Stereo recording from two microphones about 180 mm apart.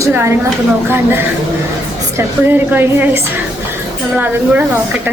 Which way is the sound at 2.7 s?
10° right (ahead or behind).